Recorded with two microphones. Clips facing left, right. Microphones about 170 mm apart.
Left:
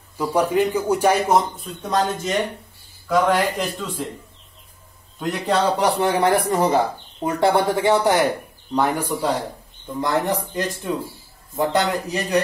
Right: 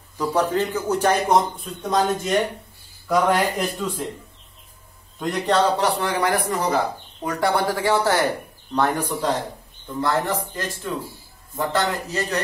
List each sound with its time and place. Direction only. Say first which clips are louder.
0.2 s a man's voice: left 2 dB; 10° left (ahead or behind)
5.2 s a man's voice: even; 5° left (ahead or behind)
5.9 s a man's voice: left 4 dB; 25° left (ahead or behind)